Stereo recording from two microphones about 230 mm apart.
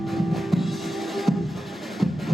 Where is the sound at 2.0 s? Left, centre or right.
Centre.